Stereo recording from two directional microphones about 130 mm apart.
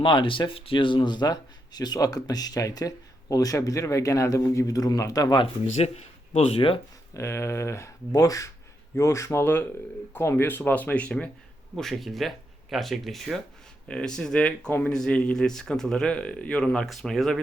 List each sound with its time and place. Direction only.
0.0 s speech: 40° left (ahead or behind)
5.8 s speech: 55° left (ahead or behind)
7.1 s speech: 20° left (ahead or behind); by 17.4 s centre (ahead or behind)